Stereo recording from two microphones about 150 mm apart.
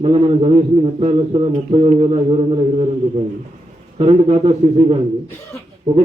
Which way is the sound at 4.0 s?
40° right (ahead or behind).